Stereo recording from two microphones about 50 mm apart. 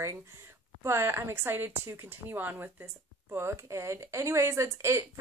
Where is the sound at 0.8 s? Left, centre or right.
Right.